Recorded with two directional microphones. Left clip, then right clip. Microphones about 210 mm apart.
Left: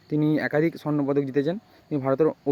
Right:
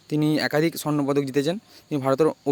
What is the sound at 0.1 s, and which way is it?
A man's voice, 15° right (ahead or behind).